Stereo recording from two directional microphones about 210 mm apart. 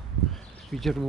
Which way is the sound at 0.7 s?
Centre (ahead or behind).